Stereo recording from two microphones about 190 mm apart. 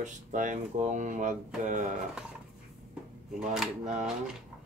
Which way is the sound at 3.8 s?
35° right (ahead or behind).